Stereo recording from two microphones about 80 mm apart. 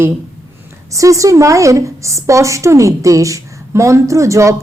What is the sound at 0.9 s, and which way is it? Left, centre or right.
A woman's voice, right.